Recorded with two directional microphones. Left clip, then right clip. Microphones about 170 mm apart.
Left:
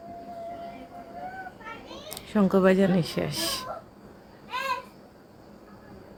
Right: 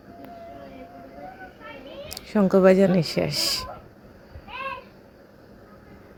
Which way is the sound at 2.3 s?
15° right (ahead or behind).